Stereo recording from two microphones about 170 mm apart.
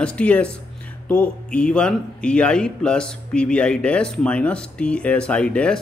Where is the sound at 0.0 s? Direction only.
5° left (ahead or behind).